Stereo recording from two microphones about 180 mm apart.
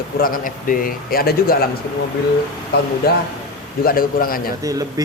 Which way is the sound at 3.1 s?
60° left (ahead or behind).